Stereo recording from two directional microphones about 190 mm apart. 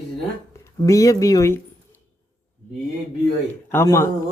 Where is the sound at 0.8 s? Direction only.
15° left (ahead or behind).